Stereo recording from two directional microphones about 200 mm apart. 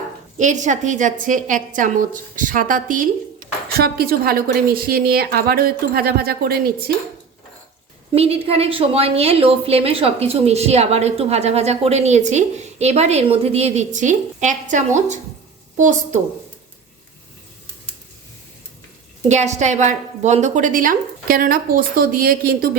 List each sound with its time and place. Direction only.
0.3 s a woman's voice: 40° right (ahead or behind)
8.1 s a woman's voice: 30° right (ahead or behind)
19.3 s a woman's voice: 35° right (ahead or behind)